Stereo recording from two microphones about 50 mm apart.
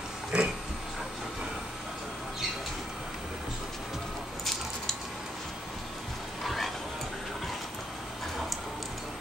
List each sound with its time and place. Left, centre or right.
0.3 s pig: centre
6.4 s dog: centre